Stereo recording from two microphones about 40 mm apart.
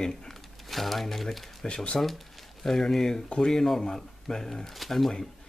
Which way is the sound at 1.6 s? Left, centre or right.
Centre.